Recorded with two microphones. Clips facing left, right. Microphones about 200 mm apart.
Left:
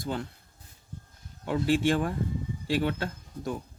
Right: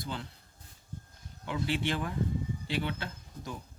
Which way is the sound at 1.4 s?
45° left (ahead or behind).